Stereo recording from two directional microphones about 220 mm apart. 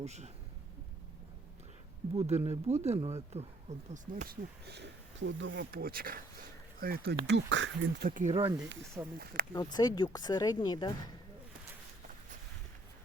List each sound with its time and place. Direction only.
0.0 s speech: 30° right (ahead or behind)
2.1 s speech: 30° right (ahead or behind)
4.6 s speech: 50° right (ahead or behind)
8.0 s speech: 35° right (ahead or behind)
9.7 s speech: 20° left (ahead or behind)